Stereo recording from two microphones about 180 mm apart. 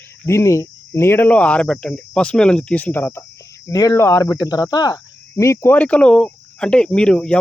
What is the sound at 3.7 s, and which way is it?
Cricket, 20° left (ahead or behind).